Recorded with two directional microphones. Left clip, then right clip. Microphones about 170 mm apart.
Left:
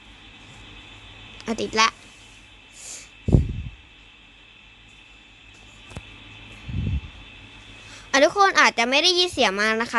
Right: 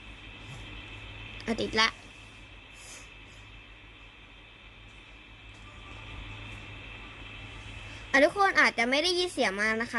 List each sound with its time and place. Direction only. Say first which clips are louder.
1.4 s speech: left 6 dB; 35° left (ahead or behind)
8.1 s a woman's voice: left 6 dB; 45° left (ahead or behind)